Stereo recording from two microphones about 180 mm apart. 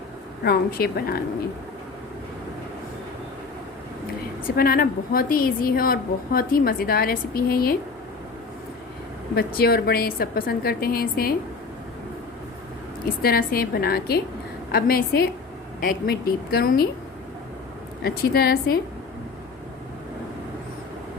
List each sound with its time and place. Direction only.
0.4 s a woman's voice: 60° left (ahead or behind)
4.4 s a woman's voice: 55° left (ahead or behind)
9.3 s a woman's voice: 60° left (ahead or behind)
13.2 s a woman's voice: 55° left (ahead or behind)
18.0 s a woman's voice: 60° left (ahead or behind)